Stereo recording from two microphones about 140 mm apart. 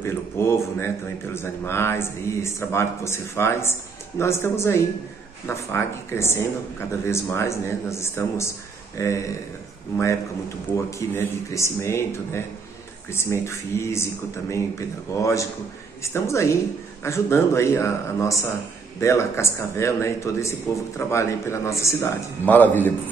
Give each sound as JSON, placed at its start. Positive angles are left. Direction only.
{"t": 0.0, "sound": "a man's voice", "side_deg": 20}
{"t": 10.7, "sound": "a man's voice", "side_deg": 20}